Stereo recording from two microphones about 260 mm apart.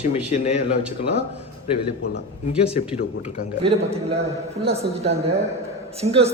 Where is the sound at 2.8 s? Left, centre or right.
Left.